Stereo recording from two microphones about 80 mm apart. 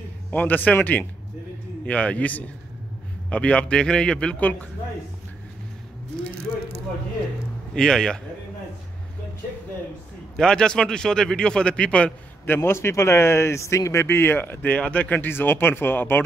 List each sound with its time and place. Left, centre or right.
0.3 s a man's voice: left
7.7 s a man's voice: centre
10.3 s a man's voice: centre
12.4 s speech: left